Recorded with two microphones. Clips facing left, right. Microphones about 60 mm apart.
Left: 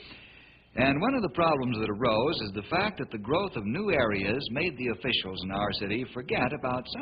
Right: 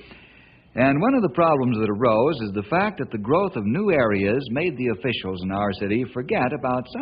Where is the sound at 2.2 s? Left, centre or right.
Right.